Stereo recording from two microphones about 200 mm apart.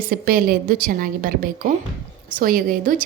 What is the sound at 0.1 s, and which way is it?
A woman's voice, 50° right (ahead or behind).